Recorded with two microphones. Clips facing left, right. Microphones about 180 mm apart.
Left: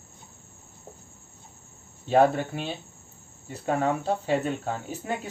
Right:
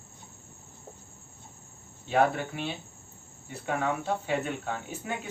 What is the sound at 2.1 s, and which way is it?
Speech, 35° left (ahead or behind).